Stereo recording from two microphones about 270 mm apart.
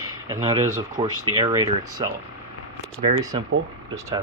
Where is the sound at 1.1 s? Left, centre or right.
Right.